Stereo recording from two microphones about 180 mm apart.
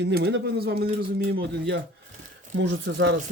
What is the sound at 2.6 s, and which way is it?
Speech, 90° right.